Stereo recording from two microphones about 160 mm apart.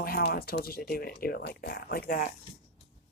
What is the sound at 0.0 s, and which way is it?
Speech, 75° left (ahead or behind).